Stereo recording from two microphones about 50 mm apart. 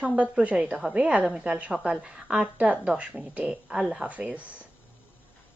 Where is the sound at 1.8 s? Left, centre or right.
Centre.